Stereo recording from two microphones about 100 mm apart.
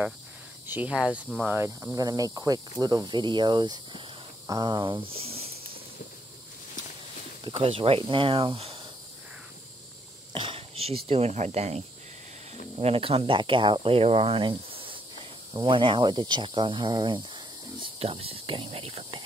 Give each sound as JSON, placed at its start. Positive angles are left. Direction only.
{"t": 0.7, "sound": "speech", "side_deg": -15}
{"t": 2.0, "sound": "speech", "side_deg": -40}
{"t": 5.2, "sound": "a sound", "side_deg": -80}
{"t": 7.4, "sound": "speech", "side_deg": -70}
{"t": 10.3, "sound": "a sound", "side_deg": -55}
{"t": 10.7, "sound": "speech", "side_deg": -75}
{"t": 12.8, "sound": "speech", "side_deg": -75}
{"t": 13.8, "sound": "speech", "side_deg": -70}
{"t": 17.8, "sound": "speech", "side_deg": -75}